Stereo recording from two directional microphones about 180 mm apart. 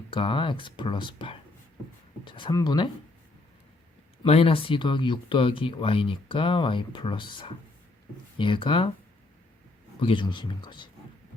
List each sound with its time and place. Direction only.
0.1 s speech: 30° left (ahead or behind)
4.2 s speech: 35° left (ahead or behind)
10.0 s speech: 30° left (ahead or behind)